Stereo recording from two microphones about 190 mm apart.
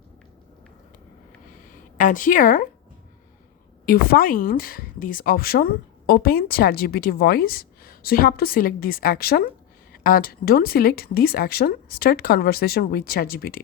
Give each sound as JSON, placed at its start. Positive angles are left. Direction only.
{"t": 2.0, "sound": "a woman's voice", "side_deg": 45}
{"t": 3.8, "sound": "a woman's voice", "side_deg": 50}